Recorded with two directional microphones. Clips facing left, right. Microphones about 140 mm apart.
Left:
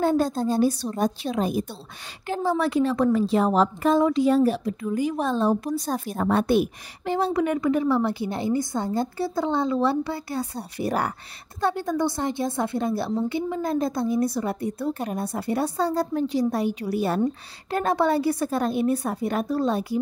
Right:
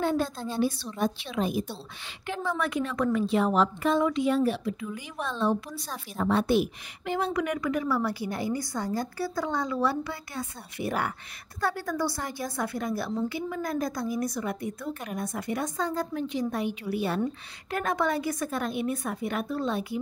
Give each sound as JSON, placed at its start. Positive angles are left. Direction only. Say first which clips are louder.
{"t": 0.0, "sound": "a woman's voice", "louder": "left 6 dB", "side_deg": 40}
{"t": 7.1, "sound": "a woman's voice", "louder": "left 5 dB", "side_deg": 30}
{"t": 11.6, "sound": "a woman's voice", "louder": "left 5 dB", "side_deg": 20}